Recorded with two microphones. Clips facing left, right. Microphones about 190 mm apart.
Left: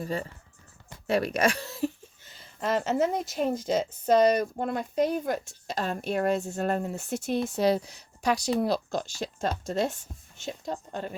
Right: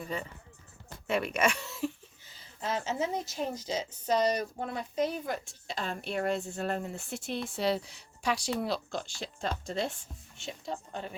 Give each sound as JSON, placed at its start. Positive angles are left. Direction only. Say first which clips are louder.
{"t": 0.0, "sound": "speech", "louder": "left 5 dB", "side_deg": 35}
{"t": 2.6, "sound": "a woman's voice", "louder": "left 7 dB", "side_deg": 65}